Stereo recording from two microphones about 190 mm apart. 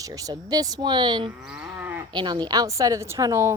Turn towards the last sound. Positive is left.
turn(degrees=-15)  # may be behind; listen again after turning